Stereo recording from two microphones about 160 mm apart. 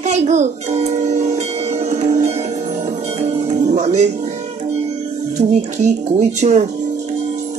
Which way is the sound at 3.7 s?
45° right (ahead or behind).